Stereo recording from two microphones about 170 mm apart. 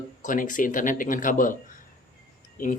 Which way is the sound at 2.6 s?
50° left (ahead or behind).